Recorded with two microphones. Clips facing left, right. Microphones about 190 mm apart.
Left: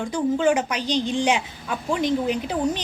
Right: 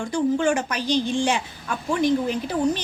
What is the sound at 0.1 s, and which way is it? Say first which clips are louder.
A woman's voice: even; 15° left (ahead or behind).